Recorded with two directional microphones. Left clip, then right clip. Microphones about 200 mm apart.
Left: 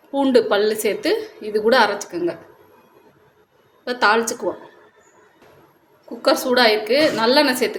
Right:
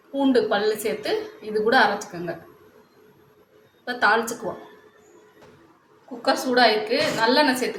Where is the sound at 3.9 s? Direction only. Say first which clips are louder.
Left 3 dB; 50° left (ahead or behind).